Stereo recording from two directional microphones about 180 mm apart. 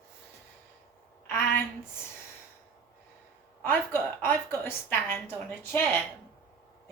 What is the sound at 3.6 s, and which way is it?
A woman's voice, 10° left (ahead or behind).